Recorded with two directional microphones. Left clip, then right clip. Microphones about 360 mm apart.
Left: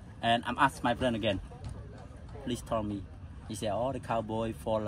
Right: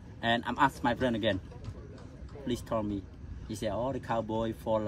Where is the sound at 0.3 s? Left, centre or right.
Centre.